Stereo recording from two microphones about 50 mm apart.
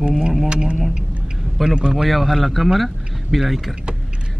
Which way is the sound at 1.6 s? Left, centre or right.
Centre.